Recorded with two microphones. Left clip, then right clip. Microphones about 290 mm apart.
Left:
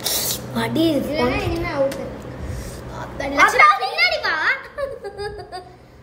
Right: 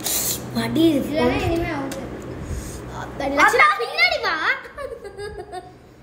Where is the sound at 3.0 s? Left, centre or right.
Centre.